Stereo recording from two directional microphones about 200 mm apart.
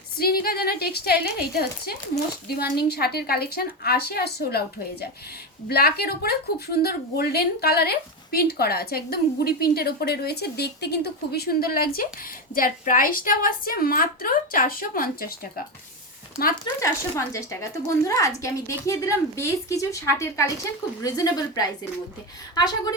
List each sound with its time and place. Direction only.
0.2 s a woman's voice: 50° left (ahead or behind)
16.8 s a woman's voice: 15° left (ahead or behind)